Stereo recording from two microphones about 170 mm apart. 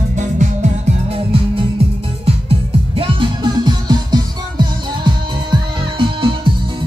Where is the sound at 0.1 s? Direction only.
45° right (ahead or behind).